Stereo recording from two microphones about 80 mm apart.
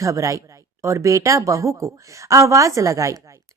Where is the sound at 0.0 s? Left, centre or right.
Right.